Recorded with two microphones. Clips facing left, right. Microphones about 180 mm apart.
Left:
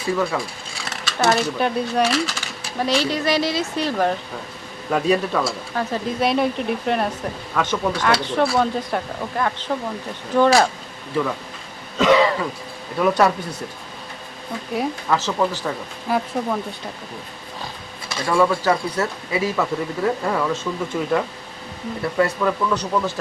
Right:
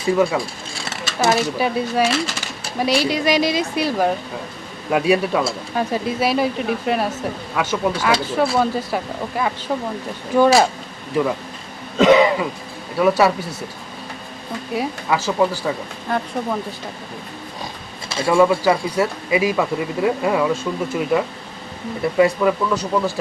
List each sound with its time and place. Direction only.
0.2 s speech: 15° right (ahead or behind)
1.2 s speech: 5° right (ahead or behind)
5.4 s throat clearing: 25° right (ahead or behind)
5.9 s speech: 5° right (ahead or behind)
11.9 s throat clearing: 25° right (ahead or behind)
13.0 s speech: 5° right (ahead or behind)
14.7 s speech: 5° right (ahead or behind)
16.0 s speech: 5° left (ahead or behind)
18.3 s speech: 10° right (ahead or behind)